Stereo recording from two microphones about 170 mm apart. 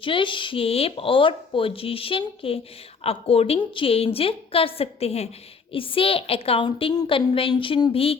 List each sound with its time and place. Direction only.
0.0 s speech: 30° left (ahead or behind)